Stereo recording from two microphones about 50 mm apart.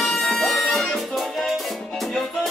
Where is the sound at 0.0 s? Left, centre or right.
Centre.